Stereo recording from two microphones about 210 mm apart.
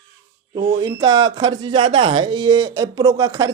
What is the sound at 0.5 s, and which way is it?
Speech, 25° right (ahead or behind).